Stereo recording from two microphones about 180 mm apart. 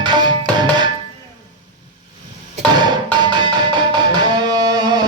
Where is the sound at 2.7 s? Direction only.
25° right (ahead or behind).